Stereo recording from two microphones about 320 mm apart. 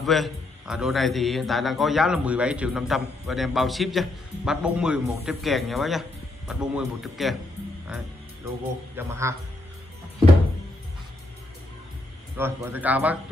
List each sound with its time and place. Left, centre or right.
0.0 s a man's voice: centre
8.9 s speech: centre
12.4 s a man's voice: centre